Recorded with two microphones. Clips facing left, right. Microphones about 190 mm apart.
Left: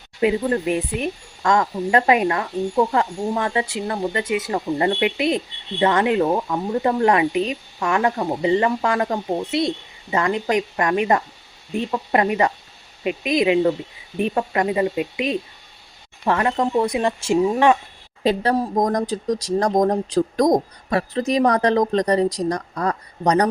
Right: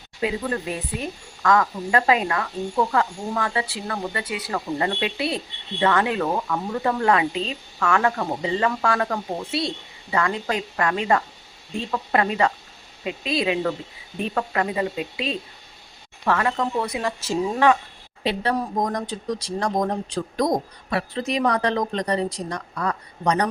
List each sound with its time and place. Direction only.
0.2 s speech: 20° left (ahead or behind)
18.2 s speech: 40° left (ahead or behind)